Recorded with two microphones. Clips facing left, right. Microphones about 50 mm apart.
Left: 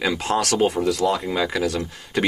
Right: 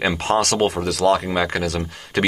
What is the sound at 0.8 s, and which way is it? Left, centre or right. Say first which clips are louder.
Speech: right 3 dB; right.